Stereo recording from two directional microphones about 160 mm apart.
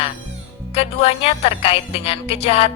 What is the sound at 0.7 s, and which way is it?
Speech, 40° left (ahead or behind).